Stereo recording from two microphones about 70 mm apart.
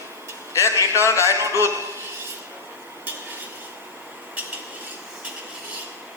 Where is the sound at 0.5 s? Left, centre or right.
Left.